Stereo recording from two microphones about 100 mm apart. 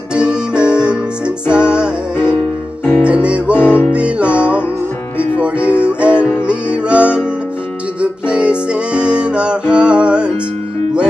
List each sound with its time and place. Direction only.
0.1 s music: 10° right (ahead or behind)
3.5 s music: 20° left (ahead or behind)
3.9 s music: 10° right (ahead or behind)
5.7 s music: 20° left (ahead or behind)
5.9 s music: 10° right (ahead or behind)